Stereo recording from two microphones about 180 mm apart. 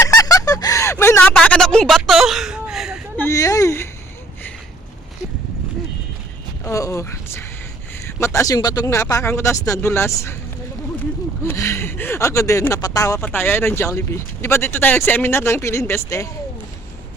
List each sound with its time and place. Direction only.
0.0 s a sound: 20° left (ahead or behind); by 3.0 s centre (ahead or behind)
3.2 s speech: 15° left (ahead or behind)
6.7 s speech: 20° left (ahead or behind)
11.4 s speech: 15° left (ahead or behind)